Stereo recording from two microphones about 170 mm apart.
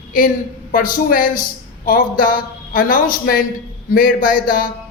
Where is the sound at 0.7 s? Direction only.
55° left (ahead or behind).